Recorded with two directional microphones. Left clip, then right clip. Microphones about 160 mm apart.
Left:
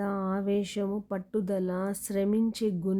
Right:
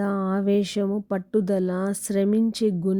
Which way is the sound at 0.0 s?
35° right (ahead or behind).